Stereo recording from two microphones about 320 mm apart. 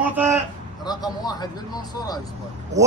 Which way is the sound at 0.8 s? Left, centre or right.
Centre.